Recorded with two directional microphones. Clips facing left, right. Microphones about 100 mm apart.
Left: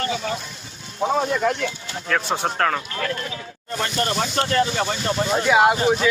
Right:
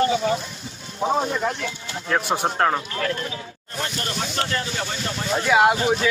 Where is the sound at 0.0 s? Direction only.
25° right (ahead or behind).